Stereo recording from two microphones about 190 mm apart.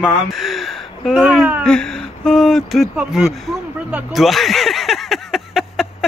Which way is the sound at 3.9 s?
Centre (ahead or behind).